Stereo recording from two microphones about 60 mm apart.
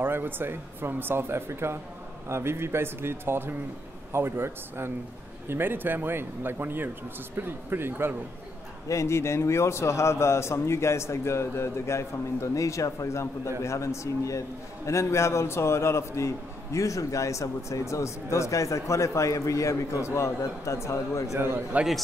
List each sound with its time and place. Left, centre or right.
0.0 s speech: right
8.8 s a man's voice: left
21.4 s speech: right